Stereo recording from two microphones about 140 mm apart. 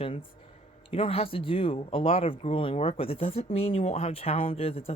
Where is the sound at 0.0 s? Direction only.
40° left (ahead or behind).